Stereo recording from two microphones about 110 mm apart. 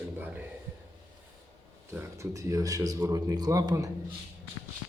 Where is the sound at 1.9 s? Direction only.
25° right (ahead or behind).